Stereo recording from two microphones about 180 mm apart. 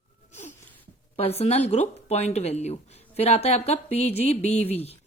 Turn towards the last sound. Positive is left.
turn(degrees=35)  # may be behind; listen again after turning